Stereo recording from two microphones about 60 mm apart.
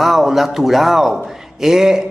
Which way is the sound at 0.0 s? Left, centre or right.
Centre.